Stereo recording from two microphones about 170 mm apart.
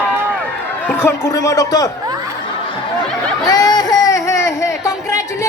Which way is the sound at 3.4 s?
20° left (ahead or behind).